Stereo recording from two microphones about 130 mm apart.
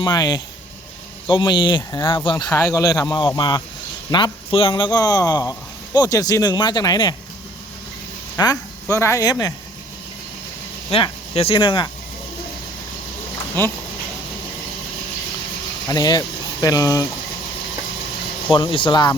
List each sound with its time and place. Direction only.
0.0 s speech: 35° left (ahead or behind)
4.7 s speech: 30° left (ahead or behind)
8.4 s speech: 25° left (ahead or behind)
10.8 s speech: 45° left (ahead or behind)
13.6 s speech: 15° left (ahead or behind)
15.9 s speech: 30° left (ahead or behind)
18.5 s speech: 40° left (ahead or behind)